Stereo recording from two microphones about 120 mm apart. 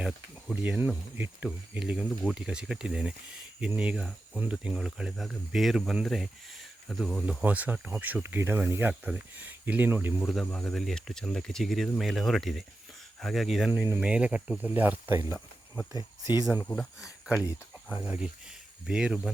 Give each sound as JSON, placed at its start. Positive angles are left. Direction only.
{"t": 0.5, "sound": "speech", "side_deg": -10}
{"t": 7.4, "sound": "speech", "side_deg": -15}
{"t": 10.2, "sound": "speech", "side_deg": 0}
{"t": 14.0, "sound": "speech", "side_deg": -10}
{"t": 15.9, "sound": "speech", "side_deg": 35}
{"t": 17.9, "sound": "speech", "side_deg": -10}